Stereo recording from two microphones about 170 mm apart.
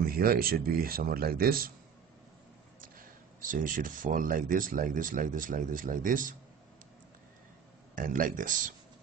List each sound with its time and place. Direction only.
0.0 s speech: 60° right (ahead or behind)
3.3 s speech: 50° right (ahead or behind)
7.9 s speech: 55° right (ahead or behind)